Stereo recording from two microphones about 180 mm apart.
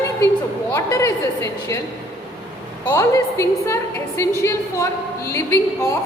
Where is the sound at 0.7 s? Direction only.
15° left (ahead or behind).